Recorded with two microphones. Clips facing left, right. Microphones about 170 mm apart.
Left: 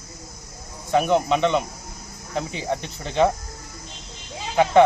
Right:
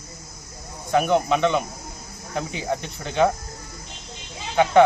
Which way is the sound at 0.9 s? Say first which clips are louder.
Even; centre (ahead or behind).